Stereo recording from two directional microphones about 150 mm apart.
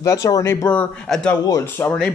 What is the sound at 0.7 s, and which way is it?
Speech, 10° left (ahead or behind).